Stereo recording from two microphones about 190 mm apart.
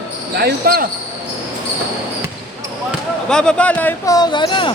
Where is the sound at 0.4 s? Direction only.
55° right (ahead or behind).